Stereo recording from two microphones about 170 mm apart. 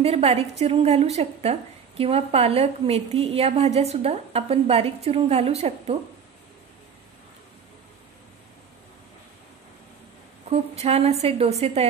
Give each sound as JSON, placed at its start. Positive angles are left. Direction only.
{"t": 0.0, "sound": "a woman's voice", "side_deg": -35}
{"t": 10.5, "sound": "a woman's voice", "side_deg": -35}